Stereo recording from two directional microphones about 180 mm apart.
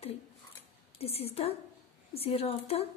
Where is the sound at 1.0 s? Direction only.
35° left (ahead or behind).